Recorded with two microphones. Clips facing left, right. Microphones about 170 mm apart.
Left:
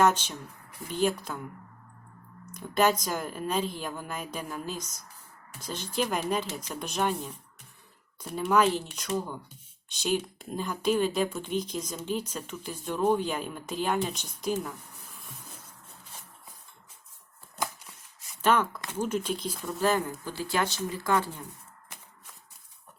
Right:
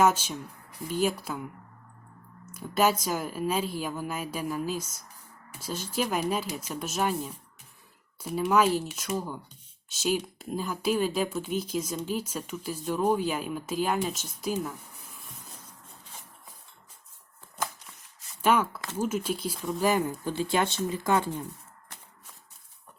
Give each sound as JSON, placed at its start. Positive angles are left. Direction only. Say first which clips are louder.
{"t": 0.0, "sound": "a woman's voice", "louder": "even", "side_deg": -10}
{"t": 2.5, "sound": "a woman's voice", "louder": "even", "side_deg": -5}
{"t": 18.4, "sound": "a woman's voice", "louder": "right 1 dB", "side_deg": -10}
{"t": 19.8, "sound": "speech", "louder": "right 1 dB", "side_deg": -15}